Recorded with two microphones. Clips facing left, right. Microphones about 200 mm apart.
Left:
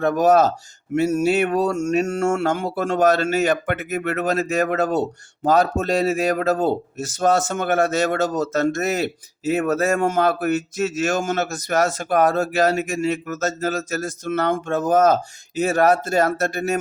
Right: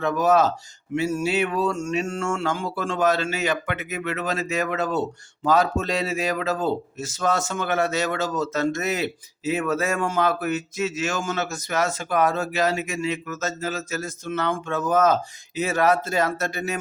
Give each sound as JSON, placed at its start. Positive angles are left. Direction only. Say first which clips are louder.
{"t": 0.0, "sound": "a man's voice", "louder": "left 4 dB", "side_deg": 50}
{"t": 3.0, "sound": "speech", "louder": "left 5 dB", "side_deg": 45}